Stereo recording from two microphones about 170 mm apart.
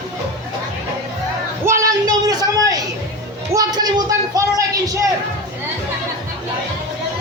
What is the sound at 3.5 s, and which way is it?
Speech, 20° right (ahead or behind).